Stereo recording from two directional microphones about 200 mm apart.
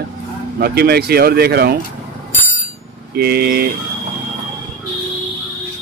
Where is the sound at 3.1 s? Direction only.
50° right (ahead or behind).